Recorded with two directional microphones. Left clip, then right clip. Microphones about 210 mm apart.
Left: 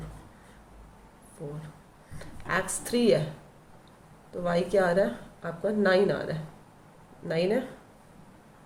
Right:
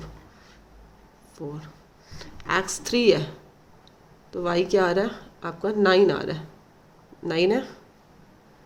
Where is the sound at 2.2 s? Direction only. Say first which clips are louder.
Right 4 dB; 55° right (ahead or behind).